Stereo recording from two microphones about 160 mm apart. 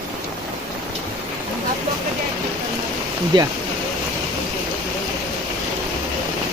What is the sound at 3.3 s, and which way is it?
Speech, 30° right (ahead or behind).